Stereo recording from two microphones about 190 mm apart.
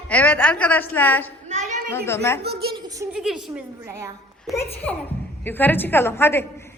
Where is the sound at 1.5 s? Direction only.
40° right (ahead or behind).